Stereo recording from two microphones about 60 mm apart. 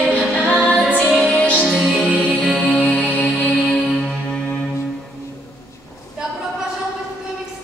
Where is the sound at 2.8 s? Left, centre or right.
Centre.